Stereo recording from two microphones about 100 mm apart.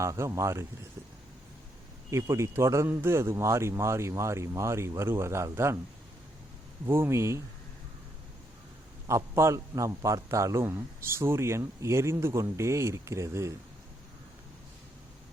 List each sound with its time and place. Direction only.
0.0 s a man's voice: 30° right (ahead or behind)
2.0 s a man's voice: 30° right (ahead or behind)
6.8 s a man's voice: 25° right (ahead or behind)
9.0 s a man's voice: 30° right (ahead or behind)